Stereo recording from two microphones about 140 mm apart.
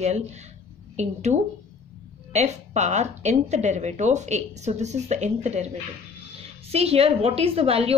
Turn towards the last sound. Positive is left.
turn(degrees=-45)  # may be behind; listen again after turning